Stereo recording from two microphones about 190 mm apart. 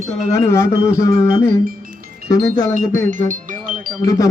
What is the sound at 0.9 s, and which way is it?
Music, 15° left (ahead or behind).